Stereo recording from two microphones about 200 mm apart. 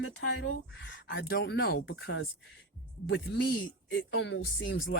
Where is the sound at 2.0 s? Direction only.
80° left.